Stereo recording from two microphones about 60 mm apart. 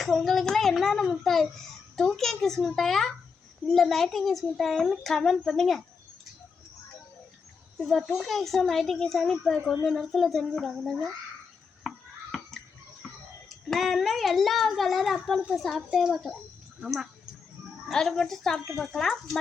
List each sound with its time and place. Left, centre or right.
0.0 s a child's voice: centre
7.9 s a child's voice: centre
11.8 s a sound: centre
13.7 s a child's voice: centre
16.1 s a child's voice: centre
16.8 s speech: centre
17.9 s a child's voice: centre